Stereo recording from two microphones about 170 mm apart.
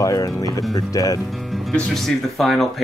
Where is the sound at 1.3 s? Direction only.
Centre (ahead or behind).